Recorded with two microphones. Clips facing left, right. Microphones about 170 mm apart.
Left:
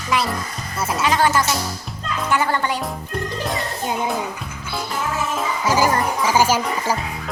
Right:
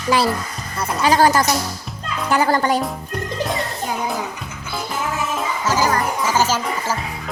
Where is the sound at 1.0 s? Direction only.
35° right (ahead or behind).